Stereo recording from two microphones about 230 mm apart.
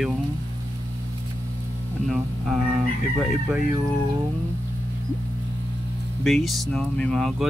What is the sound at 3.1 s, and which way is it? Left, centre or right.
Speech, centre.